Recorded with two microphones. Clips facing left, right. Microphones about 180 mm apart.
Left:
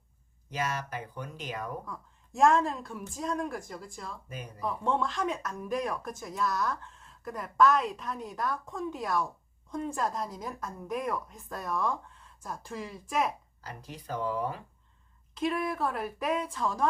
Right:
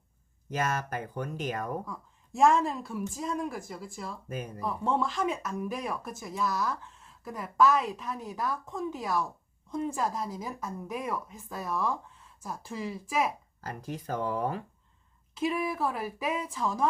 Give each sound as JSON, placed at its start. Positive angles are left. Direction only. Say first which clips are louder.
{"t": 0.5, "sound": "speech", "louder": "right 3 dB", "side_deg": -50}
{"t": 1.9, "sound": "speech", "louder": "right 2 dB", "side_deg": 0}
{"t": 4.3, "sound": "speech", "louder": "right 6 dB", "side_deg": -45}
{"t": 4.6, "sound": "speech", "louder": "even", "side_deg": 0}
{"t": 13.6, "sound": "speech", "louder": "right 6 dB", "side_deg": -50}
{"t": 15.4, "sound": "speech", "louder": "right 1 dB", "side_deg": -5}